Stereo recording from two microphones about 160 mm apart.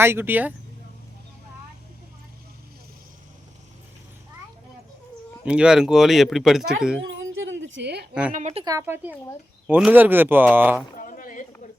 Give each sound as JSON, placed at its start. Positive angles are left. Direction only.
{"t": 0.0, "sound": "speech", "side_deg": -15}
{"t": 5.5, "sound": "speech", "side_deg": -5}
{"t": 7.8, "sound": "a woman's voice", "side_deg": -90}
{"t": 8.3, "sound": "speech", "side_deg": -45}
{"t": 8.6, "sound": "a woman's voice", "side_deg": -20}
{"t": 9.6, "sound": "speech", "side_deg": -10}
{"t": 10.9, "sound": "chink", "side_deg": 60}